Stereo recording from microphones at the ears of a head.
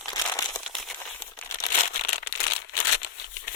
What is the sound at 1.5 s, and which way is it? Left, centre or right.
Crumpling, left.